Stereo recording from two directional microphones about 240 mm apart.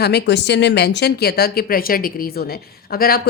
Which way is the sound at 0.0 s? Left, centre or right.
Left.